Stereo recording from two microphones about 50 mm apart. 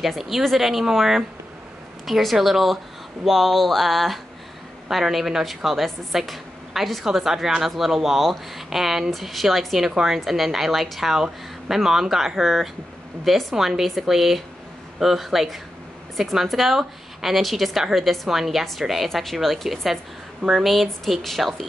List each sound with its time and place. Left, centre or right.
0.0 s speech: centre